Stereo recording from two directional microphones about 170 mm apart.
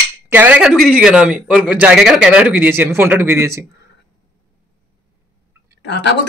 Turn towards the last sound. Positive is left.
turn(degrees=90)